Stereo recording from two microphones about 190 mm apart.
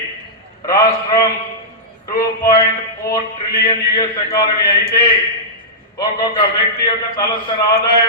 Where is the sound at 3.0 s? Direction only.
20° left (ahead or behind).